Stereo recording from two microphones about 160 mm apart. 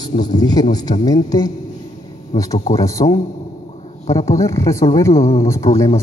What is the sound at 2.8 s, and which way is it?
Speech, 20° left (ahead or behind).